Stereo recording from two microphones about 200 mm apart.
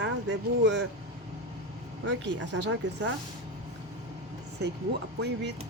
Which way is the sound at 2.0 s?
65° right (ahead or behind).